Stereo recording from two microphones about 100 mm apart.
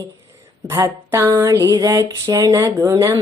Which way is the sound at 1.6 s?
35° right (ahead or behind).